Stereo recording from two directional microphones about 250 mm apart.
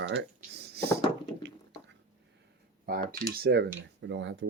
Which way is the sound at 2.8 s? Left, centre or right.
Right.